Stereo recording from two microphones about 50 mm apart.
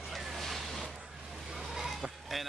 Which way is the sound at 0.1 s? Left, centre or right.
Centre.